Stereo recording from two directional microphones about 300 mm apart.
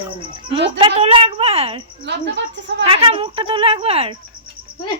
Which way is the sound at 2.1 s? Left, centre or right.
Right.